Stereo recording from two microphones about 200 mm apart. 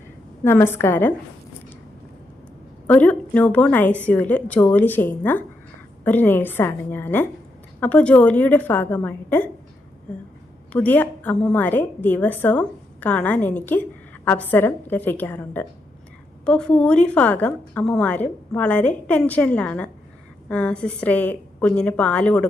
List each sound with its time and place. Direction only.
0.4 s a woman's voice: 10° left (ahead or behind)
2.8 s a woman's voice: 5° left (ahead or behind)
10.7 s a woman's voice: 5° left (ahead or behind)